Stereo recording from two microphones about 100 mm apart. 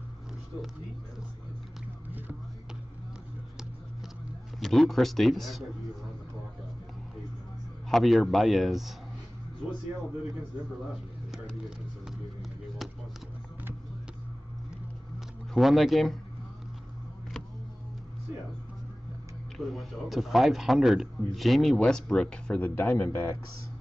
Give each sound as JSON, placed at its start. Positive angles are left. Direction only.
{"t": 4.6, "sound": "a man's voice", "side_deg": 5}
{"t": 7.9, "sound": "a man's voice", "side_deg": 0}
{"t": 15.5, "sound": "a man's voice", "side_deg": 0}
{"t": 19.5, "sound": "a man's voice", "side_deg": 0}
{"t": 22.8, "sound": "a man's voice", "side_deg": 20}